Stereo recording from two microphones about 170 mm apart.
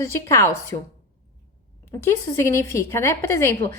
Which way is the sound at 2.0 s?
15° left (ahead or behind).